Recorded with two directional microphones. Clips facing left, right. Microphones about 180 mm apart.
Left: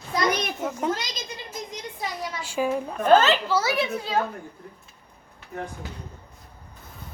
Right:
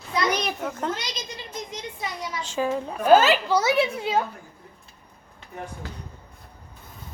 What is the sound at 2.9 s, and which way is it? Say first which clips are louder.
A child's voice: right 2 dB; 10° right (ahead or behind).